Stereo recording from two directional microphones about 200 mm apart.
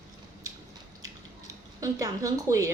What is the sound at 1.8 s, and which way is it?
Speech, 15° right (ahead or behind).